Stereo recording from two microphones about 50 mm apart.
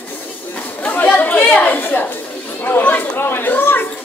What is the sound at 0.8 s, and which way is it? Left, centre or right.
Chatter, left.